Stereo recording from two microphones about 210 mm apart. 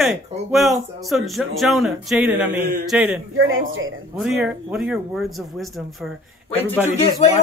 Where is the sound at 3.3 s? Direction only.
70° right (ahead or behind).